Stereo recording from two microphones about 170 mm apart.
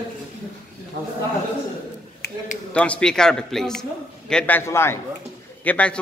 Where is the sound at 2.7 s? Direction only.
5° left (ahead or behind).